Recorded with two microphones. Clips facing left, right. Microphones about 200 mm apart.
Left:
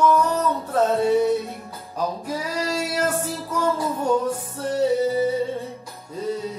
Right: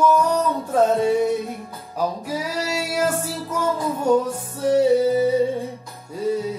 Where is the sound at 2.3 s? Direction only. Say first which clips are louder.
Even; 10° right (ahead or behind).